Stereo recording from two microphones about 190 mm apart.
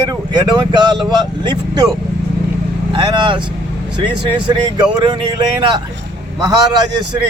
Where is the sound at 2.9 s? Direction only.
25° right (ahead or behind).